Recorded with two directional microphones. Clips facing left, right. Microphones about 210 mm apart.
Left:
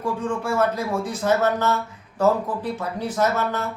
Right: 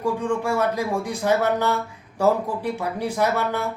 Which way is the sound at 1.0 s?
15° right (ahead or behind).